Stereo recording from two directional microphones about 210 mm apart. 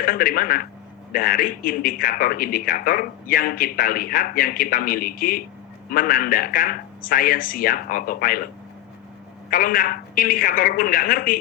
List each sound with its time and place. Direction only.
0.0 s a man's voice: 40° left (ahead or behind)
9.5 s a woman's voice: 40° left (ahead or behind)